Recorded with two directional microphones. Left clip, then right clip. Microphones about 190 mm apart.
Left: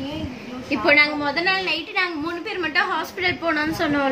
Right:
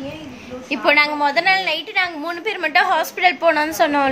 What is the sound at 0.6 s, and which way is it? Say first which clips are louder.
A woman's voice: right 1 dB; 45° right (ahead or behind).